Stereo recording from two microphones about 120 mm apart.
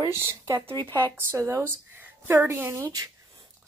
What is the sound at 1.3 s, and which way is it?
Speech, 25° right (ahead or behind).